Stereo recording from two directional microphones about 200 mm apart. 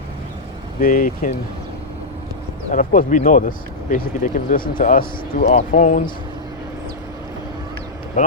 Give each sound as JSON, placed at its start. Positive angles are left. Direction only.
{"t": 0.8, "sound": "speech", "side_deg": 45}
{"t": 2.6, "sound": "speech", "side_deg": 40}